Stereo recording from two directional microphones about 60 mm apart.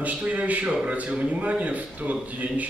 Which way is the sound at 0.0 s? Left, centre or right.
Right.